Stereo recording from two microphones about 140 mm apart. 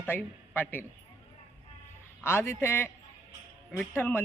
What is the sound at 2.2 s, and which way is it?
Speech, 15° left (ahead or behind).